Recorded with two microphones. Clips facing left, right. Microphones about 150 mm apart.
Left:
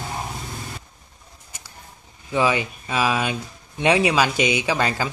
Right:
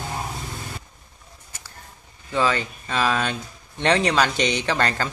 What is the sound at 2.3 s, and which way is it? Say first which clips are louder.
Speech: left 2 dB; 15° left (ahead or behind).